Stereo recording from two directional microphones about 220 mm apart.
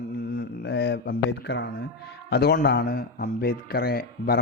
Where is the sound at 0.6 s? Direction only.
50° left (ahead or behind).